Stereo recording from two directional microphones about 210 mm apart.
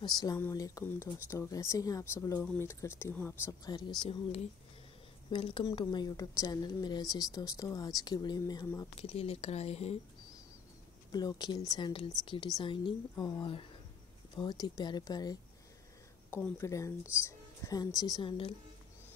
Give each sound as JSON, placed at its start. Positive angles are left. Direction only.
{"t": 0.0, "sound": "speech", "side_deg": 20}
{"t": 4.1, "sound": "a woman's voice", "side_deg": 30}
{"t": 9.1, "sound": "a woman's voice", "side_deg": 30}
{"t": 11.1, "sound": "a woman's voice", "side_deg": 20}